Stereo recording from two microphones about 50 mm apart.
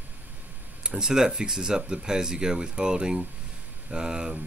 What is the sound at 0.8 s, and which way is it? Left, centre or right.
Speech, centre.